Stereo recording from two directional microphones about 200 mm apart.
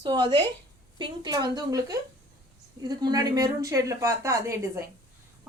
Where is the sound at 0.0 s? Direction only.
20° right (ahead or behind).